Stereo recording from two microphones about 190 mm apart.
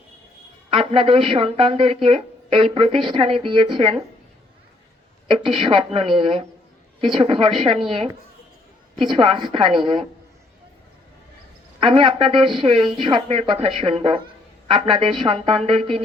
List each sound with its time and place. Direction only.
0.7 s speech: 25° right (ahead or behind)
5.5 s speech: 30° right (ahead or behind)
11.8 s speech: 25° right (ahead or behind)